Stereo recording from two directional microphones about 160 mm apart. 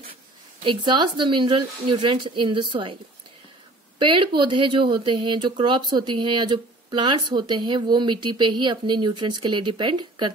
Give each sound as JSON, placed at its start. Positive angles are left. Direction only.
{"t": 0.7, "sound": "speech", "side_deg": -30}
{"t": 4.0, "sound": "speech", "side_deg": -30}